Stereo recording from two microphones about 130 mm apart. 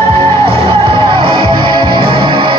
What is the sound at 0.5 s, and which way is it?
Music, 45° right (ahead or behind).